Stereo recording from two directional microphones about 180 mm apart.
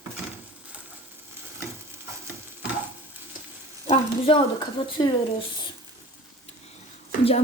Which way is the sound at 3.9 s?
30° left (ahead or behind).